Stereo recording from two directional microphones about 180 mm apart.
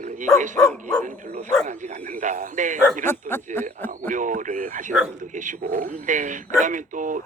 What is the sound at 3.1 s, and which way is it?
Speech, 10° left (ahead or behind).